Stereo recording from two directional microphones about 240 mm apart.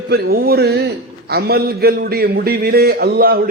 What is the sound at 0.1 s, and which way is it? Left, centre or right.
A man's voice, right.